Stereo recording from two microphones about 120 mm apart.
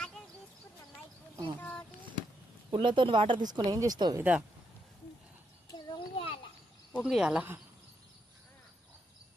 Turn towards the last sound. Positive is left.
turn(degrees=-5)  # may be behind; listen again after turning